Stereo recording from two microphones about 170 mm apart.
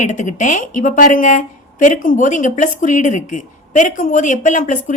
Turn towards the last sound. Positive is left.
turn(degrees=50)  # may be behind; listen again after turning